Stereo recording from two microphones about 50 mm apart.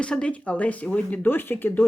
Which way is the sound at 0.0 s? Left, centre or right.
Left.